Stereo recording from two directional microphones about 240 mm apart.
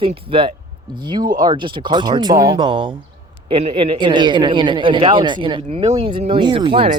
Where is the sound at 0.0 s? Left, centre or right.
Right.